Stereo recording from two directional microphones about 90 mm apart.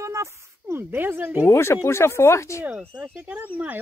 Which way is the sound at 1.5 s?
35° left (ahead or behind).